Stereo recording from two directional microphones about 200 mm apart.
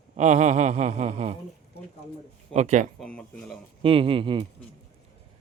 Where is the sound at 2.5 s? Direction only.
35° right (ahead or behind).